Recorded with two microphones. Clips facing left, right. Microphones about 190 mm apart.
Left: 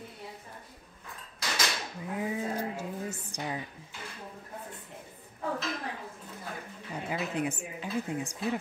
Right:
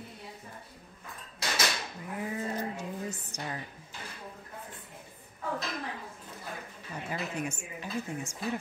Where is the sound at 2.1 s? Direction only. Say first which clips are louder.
Left 2 dB; 10° left (ahead or behind).